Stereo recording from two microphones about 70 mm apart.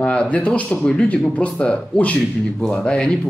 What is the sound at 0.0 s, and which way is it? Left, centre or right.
Speech, centre.